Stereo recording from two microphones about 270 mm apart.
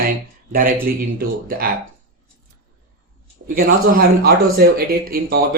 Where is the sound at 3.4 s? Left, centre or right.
Right.